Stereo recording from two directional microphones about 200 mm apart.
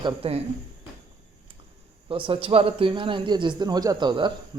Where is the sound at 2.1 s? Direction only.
25° right (ahead or behind).